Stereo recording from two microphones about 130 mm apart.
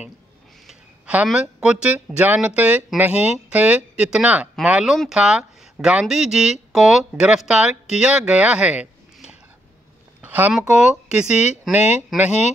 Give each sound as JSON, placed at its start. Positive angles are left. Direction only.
{"t": 0.7, "sound": "speech", "side_deg": -5}
{"t": 10.2, "sound": "a sound", "side_deg": -15}
{"t": 10.7, "sound": "speech", "side_deg": -5}
{"t": 11.7, "sound": "speech", "side_deg": 60}